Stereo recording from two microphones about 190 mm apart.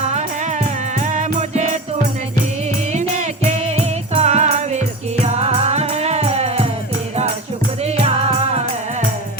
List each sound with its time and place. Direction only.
0.1 s music: 40° right (ahead or behind)
3.2 s music: 35° right (ahead or behind)
7.9 s music: 35° right (ahead or behind)